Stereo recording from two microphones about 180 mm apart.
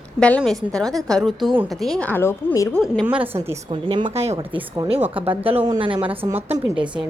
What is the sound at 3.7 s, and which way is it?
Speech, 25° right (ahead or behind).